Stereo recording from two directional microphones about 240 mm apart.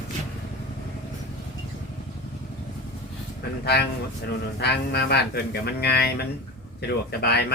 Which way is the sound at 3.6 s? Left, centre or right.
Left.